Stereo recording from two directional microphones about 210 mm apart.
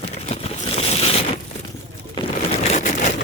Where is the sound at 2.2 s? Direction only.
30° left (ahead or behind).